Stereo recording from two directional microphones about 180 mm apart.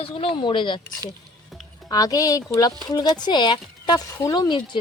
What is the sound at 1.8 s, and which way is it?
Speech, 20° left (ahead or behind).